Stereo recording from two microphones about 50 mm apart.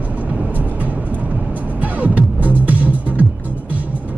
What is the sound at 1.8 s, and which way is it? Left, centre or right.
Music, right.